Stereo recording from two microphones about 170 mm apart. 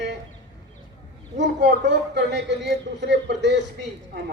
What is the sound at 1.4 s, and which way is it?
A man's voice, 90° right.